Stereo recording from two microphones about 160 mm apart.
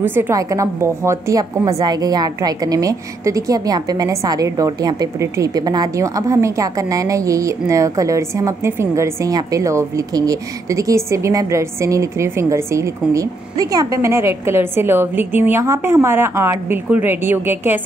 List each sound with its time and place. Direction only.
0.0 s a woman's voice: 15° right (ahead or behind)